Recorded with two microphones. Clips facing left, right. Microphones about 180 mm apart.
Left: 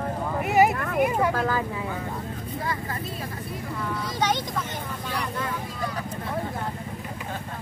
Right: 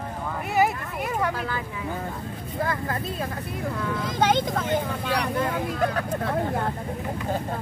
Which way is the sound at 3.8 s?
55° right (ahead or behind).